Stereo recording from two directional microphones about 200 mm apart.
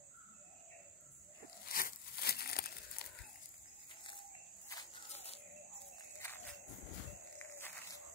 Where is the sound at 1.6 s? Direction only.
45° left (ahead or behind).